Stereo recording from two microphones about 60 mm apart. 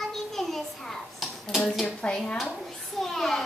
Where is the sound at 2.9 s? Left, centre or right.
Centre.